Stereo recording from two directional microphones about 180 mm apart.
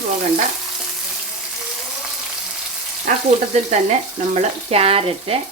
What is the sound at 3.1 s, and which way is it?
Frying, 45° right (ahead or behind).